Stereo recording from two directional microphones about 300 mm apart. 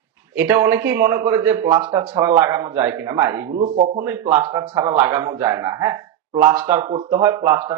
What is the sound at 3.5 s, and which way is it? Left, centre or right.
Speech, right.